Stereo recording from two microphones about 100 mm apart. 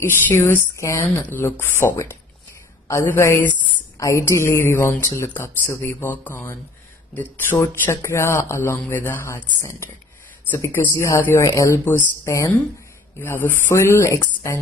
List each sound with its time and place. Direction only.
0.0 s speech: 20° left (ahead or behind)
1.2 s speech: 20° left (ahead or behind)
10.9 s speech: 30° left (ahead or behind)
11.1 s speech: 20° left (ahead or behind)
11.4 s speech: 30° left (ahead or behind)